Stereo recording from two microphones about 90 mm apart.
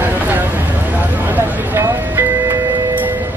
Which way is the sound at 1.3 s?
25° right (ahead or behind).